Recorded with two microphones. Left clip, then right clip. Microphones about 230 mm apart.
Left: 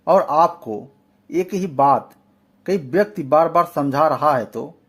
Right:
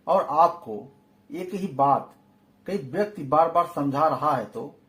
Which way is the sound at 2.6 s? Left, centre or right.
Left.